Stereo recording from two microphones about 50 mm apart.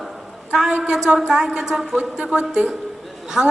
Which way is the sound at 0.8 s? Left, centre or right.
Centre.